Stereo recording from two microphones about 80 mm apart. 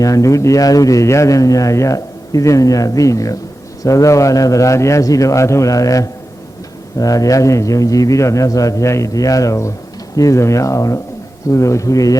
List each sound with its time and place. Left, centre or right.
0.0 s a man's voice: left